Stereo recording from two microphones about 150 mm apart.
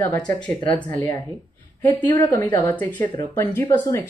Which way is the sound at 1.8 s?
20° left (ahead or behind).